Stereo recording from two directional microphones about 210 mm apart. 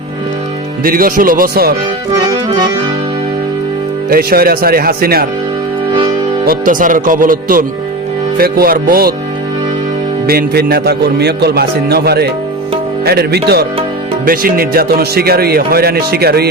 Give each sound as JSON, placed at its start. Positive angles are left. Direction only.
{"t": 0.9, "sound": "speech", "side_deg": -45}
{"t": 2.2, "sound": "accordion", "side_deg": -20}
{"t": 4.1, "sound": "speech", "side_deg": -45}
{"t": 6.4, "sound": "speech", "side_deg": -40}
{"t": 10.2, "sound": "speech", "side_deg": -50}